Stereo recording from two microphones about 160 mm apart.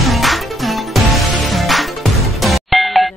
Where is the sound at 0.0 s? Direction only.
Centre (ahead or behind).